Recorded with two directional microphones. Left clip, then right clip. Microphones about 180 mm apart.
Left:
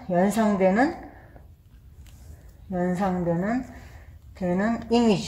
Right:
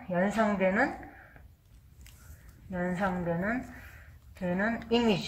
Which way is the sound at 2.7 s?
20° left (ahead or behind).